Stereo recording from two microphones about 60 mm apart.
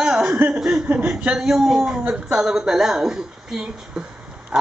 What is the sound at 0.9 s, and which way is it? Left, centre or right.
Speech, centre.